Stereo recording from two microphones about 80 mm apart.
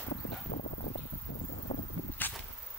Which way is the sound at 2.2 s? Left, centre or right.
Left.